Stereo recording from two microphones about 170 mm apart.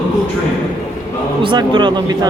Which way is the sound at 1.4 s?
30° right (ahead or behind).